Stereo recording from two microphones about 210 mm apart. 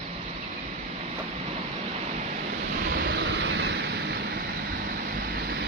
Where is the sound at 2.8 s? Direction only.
50° right (ahead or behind).